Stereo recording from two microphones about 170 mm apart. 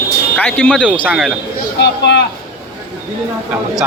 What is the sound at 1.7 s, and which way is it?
Speech, 90° left.